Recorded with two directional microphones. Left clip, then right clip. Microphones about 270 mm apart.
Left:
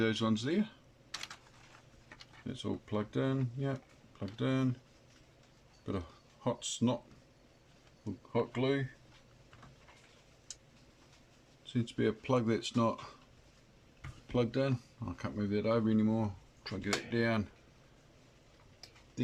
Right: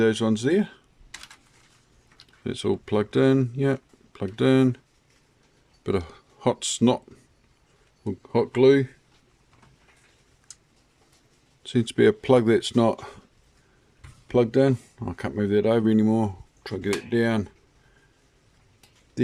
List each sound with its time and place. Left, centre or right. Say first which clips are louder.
0.0 s speech: right 11 dB; right
2.5 s speech: right 14 dB; right
5.8 s speech: right 14 dB; right
8.3 s speech: right 15 dB; right
11.6 s speech: right 14 dB; right
14.3 s speech: right 13 dB; right